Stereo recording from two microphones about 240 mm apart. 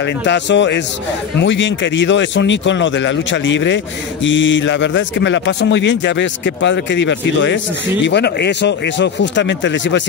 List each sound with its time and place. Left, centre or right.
0.0 s speech: left